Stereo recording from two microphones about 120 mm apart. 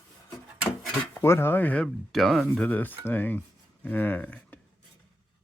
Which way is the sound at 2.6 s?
10° left (ahead or behind).